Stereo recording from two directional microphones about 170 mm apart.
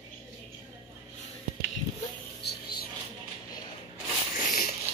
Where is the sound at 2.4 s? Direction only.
65° left (ahead or behind).